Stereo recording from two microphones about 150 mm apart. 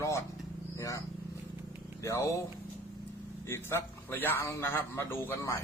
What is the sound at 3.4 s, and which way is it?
A man's voice, 15° left (ahead or behind).